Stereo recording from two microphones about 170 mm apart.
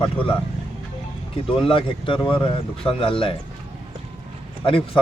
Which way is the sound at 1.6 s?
30° left (ahead or behind).